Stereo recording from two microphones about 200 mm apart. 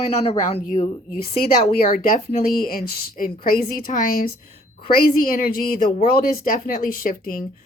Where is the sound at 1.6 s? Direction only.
45° left (ahead or behind).